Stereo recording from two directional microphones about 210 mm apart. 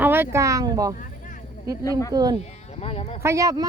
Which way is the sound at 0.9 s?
40° left (ahead or behind).